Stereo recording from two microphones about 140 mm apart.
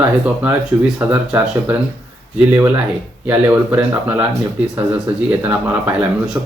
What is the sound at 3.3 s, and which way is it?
Speech, 15° right (ahead or behind).